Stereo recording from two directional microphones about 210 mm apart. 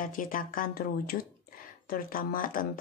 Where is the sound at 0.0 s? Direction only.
40° left (ahead or behind).